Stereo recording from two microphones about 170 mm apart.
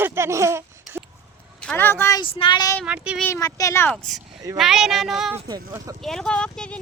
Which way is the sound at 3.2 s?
15° left (ahead or behind).